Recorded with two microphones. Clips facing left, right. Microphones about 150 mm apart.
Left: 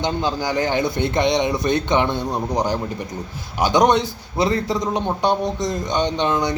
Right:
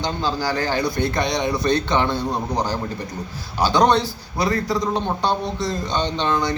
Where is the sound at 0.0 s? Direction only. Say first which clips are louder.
Left 1 dB; 20° left (ahead or behind).